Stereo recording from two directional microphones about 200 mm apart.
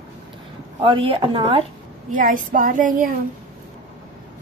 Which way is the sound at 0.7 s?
25° right (ahead or behind).